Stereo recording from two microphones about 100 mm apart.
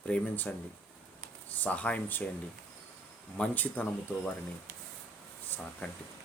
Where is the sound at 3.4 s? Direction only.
15° left (ahead or behind).